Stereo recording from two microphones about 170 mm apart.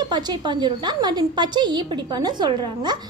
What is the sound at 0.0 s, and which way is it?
A woman's voice, 25° right (ahead or behind).